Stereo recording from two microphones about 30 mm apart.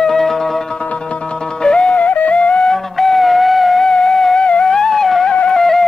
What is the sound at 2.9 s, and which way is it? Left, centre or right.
Music, centre.